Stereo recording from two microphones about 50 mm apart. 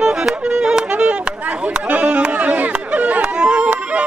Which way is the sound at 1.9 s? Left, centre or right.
Right.